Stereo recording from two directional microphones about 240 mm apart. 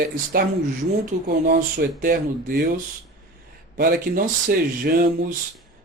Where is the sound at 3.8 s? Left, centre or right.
Right.